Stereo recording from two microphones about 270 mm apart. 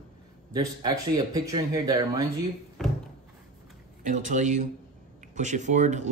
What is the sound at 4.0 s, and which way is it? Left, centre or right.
Speech, right.